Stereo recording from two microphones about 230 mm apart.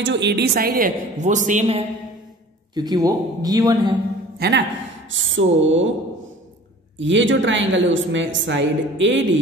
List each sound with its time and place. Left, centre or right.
0.0 s a woman's voice: right
2.7 s a man's voice: centre
4.4 s a man's voice: right
7.0 s a woman's voice: right